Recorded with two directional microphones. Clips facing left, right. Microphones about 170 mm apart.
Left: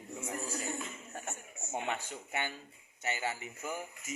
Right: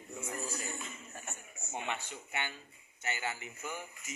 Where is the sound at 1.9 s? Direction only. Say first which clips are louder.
Left 2 dB; 40° left (ahead or behind).